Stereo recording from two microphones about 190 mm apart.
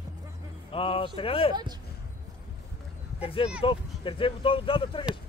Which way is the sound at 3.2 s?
30° left (ahead or behind).